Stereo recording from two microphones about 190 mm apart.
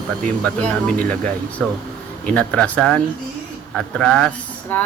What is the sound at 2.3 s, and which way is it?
Speech, 5° left (ahead or behind).